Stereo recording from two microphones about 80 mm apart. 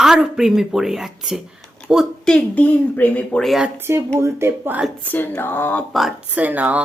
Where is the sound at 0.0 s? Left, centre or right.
Centre.